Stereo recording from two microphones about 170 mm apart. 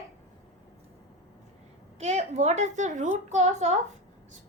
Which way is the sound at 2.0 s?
40° right (ahead or behind).